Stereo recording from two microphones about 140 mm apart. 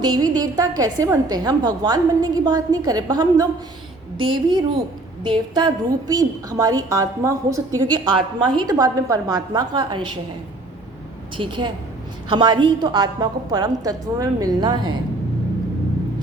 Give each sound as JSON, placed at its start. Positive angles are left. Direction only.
{"t": 0.0, "sound": "a woman's voice", "side_deg": -30}
{"t": 11.3, "sound": "a woman's voice", "side_deg": -35}